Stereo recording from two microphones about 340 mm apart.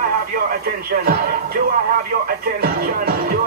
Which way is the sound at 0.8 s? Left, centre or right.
Right.